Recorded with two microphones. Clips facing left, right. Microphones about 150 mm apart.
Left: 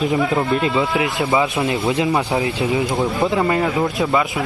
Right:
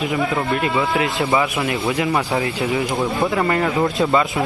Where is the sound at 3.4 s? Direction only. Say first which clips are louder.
Even; 10° left (ahead or behind).